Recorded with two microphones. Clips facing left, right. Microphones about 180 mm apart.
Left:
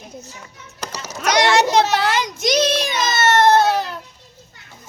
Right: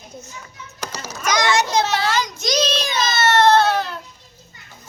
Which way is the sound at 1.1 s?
70° left (ahead or behind).